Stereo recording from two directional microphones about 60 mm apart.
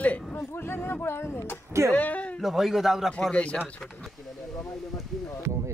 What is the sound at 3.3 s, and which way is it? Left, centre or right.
Speech, left.